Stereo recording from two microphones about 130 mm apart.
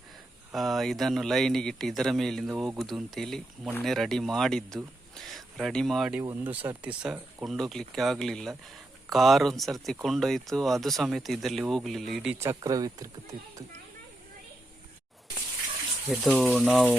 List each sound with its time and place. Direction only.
0.5 s speech: centre (ahead or behind)
6.2 s speech: 15° right (ahead or behind)
12.4 s speech: 25° right (ahead or behind)
16.0 s speech: centre (ahead or behind)